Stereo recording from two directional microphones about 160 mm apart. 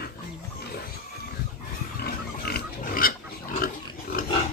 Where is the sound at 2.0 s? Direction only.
75° left (ahead or behind); by 4.2 s 60° left (ahead or behind).